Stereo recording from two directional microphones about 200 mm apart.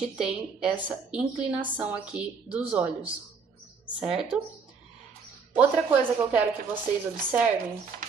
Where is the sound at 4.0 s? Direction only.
5° right (ahead or behind).